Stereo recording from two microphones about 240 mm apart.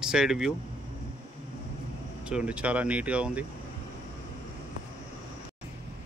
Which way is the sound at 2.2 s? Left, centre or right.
Centre.